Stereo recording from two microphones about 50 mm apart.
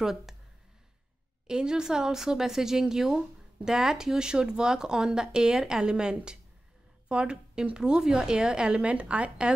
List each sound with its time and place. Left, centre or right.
0.0 s speech: centre
1.5 s speech: centre